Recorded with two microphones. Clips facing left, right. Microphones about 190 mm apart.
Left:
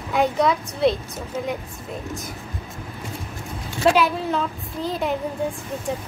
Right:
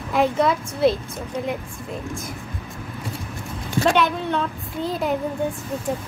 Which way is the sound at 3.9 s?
5° left (ahead or behind).